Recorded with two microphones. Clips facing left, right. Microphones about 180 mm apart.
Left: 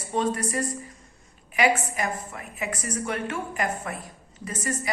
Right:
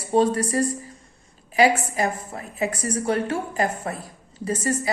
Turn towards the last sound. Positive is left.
turn(degrees=-30)  # may be behind; listen again after turning